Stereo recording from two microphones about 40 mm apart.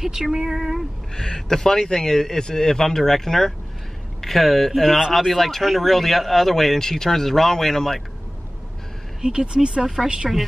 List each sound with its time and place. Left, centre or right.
0.0 s speech: centre
1.1 s speech: centre
9.2 s speech: centre